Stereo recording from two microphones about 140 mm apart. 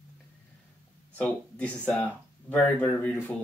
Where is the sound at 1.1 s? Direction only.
10° left (ahead or behind).